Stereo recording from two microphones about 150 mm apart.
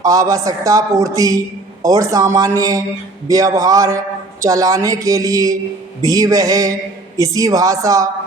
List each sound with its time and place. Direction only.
0.0 s speech: 25° right (ahead or behind)